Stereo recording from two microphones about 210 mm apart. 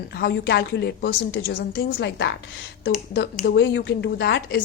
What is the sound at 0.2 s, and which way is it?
Speech, 50° left (ahead or behind).